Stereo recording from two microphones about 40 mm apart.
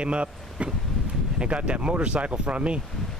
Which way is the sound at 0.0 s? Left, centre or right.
Right.